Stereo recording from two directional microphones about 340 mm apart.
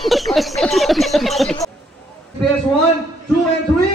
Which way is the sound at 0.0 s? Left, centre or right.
Centre.